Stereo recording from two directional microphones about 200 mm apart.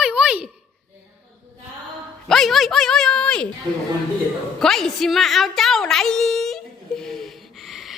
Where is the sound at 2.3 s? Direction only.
Centre (ahead or behind).